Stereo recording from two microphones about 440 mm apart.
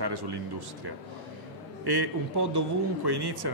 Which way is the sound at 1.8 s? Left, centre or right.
Right.